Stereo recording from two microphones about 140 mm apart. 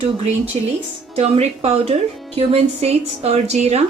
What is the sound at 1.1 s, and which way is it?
Speech, 50° right (ahead or behind).